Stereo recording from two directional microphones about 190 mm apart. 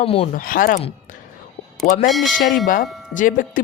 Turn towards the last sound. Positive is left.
turn(degrees=45)  # may be behind; listen again after turning